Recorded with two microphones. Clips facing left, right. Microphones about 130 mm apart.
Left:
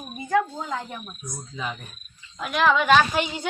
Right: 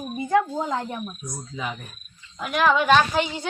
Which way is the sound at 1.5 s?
5° right (ahead or behind).